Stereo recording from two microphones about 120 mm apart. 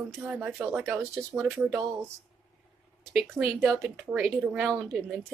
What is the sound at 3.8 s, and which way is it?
Speech, 10° right (ahead or behind).